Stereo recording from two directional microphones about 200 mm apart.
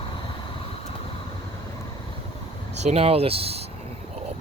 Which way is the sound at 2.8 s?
30° right (ahead or behind).